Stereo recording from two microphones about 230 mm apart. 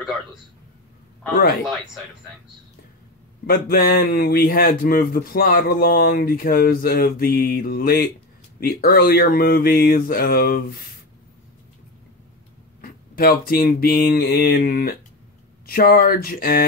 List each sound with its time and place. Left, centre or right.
3.4 s a man's voice: left
12.8 s a man's voice: left